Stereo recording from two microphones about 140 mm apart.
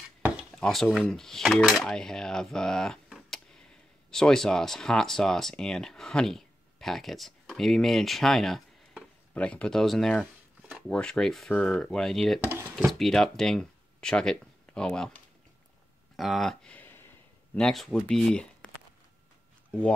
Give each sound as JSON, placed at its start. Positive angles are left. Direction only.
{"t": 0.6, "sound": "speech", "side_deg": 0}
{"t": 12.4, "sound": "a sound", "side_deg": -15}
{"t": 12.7, "sound": "speech", "side_deg": 0}
{"t": 16.2, "sound": "speech", "side_deg": 0}
{"t": 17.6, "sound": "speech", "side_deg": 0}